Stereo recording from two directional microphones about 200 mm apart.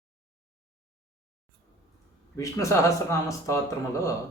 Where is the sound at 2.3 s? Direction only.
15° left (ahead or behind).